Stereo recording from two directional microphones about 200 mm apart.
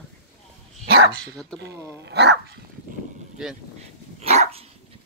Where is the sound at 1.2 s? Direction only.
5° left (ahead or behind).